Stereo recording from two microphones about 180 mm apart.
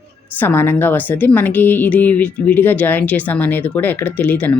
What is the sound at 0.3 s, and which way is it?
A woman's voice, 10° left (ahead or behind).